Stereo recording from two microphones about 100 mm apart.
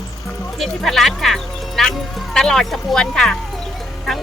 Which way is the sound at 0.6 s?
Centre (ahead or behind).